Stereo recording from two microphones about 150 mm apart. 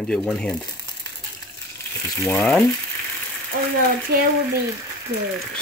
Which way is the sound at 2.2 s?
20° left (ahead or behind).